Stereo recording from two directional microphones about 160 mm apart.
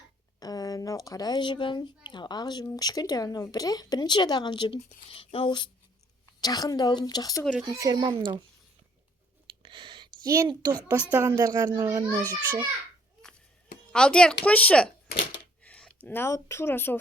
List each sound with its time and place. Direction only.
0.3 s a woman's voice: 25° left (ahead or behind)
7.6 s a child's voice: 20° right (ahead or behind)
9.6 s a sound: 30° right (ahead or behind)
10.2 s a child's voice: 20° right (ahead or behind)
13.9 s speech: 5° left (ahead or behind)